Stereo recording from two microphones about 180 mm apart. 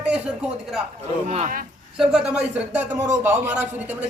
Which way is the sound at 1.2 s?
40° right (ahead or behind).